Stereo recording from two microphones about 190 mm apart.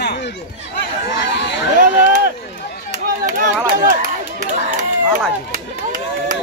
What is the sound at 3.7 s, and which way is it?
Speech, 50° right (ahead or behind).